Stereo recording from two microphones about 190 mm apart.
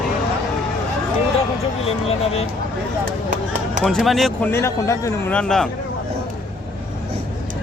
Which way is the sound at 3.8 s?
Centre (ahead or behind).